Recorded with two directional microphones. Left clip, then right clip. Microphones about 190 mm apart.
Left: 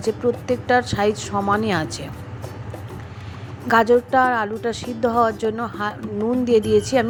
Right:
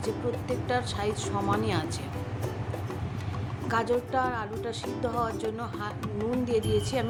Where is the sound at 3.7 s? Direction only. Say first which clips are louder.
Left 12 dB; 35° left (ahead or behind).